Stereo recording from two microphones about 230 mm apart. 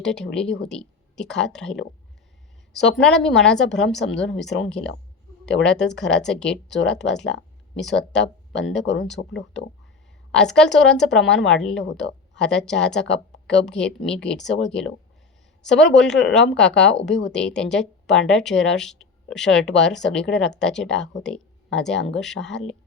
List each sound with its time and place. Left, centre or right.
0.0 s speech: centre
8.8 s speech: left
10.3 s speech: centre